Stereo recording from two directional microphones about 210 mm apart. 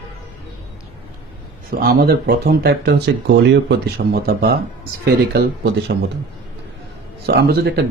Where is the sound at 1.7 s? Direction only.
45° right (ahead or behind).